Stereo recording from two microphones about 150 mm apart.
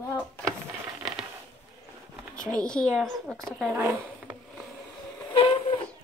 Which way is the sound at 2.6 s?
5° left (ahead or behind).